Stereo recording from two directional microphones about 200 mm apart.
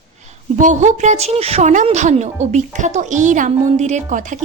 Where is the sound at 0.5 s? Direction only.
40° right (ahead or behind).